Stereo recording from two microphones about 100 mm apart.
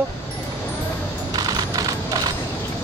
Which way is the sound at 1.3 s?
40° right (ahead or behind).